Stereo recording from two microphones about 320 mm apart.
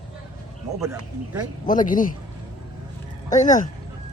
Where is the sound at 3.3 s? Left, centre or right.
Left.